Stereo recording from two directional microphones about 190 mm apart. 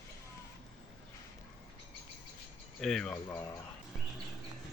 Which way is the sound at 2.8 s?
Centre (ahead or behind).